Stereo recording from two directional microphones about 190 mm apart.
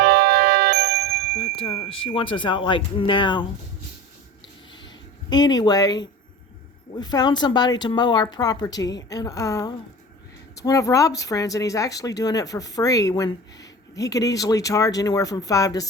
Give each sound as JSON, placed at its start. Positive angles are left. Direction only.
{"t": 0.0, "sound": "music", "side_deg": -55}
{"t": 1.4, "sound": "music", "side_deg": 35}
{"t": 1.9, "sound": "speech", "side_deg": 30}
{"t": 4.8, "sound": "a sound", "side_deg": 20}
{"t": 6.9, "sound": "speech", "side_deg": 20}